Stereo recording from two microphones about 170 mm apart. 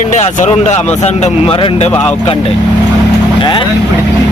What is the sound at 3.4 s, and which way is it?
Speech, 30° left (ahead or behind).